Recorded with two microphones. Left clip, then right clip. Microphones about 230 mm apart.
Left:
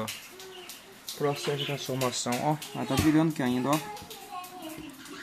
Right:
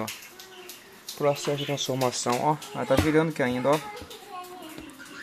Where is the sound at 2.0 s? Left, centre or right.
Centre.